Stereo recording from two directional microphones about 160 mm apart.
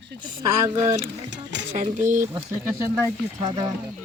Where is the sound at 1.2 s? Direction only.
90° right.